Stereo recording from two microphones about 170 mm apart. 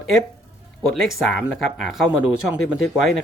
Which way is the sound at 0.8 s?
Centre (ahead or behind).